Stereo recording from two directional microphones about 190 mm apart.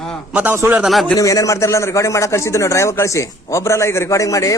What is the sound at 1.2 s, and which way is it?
A man's voice, 20° left (ahead or behind).